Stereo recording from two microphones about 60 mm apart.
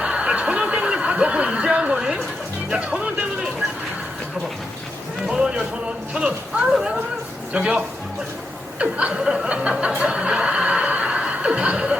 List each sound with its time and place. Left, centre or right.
0.0 s snicker: centre
2.6 s speech: centre
5.2 s a man's voice: centre
8.8 s music: centre